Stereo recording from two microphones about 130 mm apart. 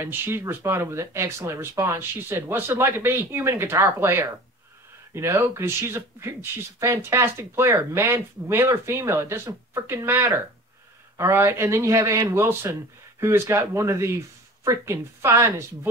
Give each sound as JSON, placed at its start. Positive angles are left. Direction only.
{"t": 0.0, "sound": "speech", "side_deg": -20}